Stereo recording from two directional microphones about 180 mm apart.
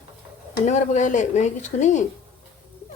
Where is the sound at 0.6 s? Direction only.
40° left (ahead or behind).